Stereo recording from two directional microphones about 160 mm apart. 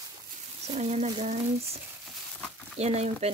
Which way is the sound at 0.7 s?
40° right (ahead or behind).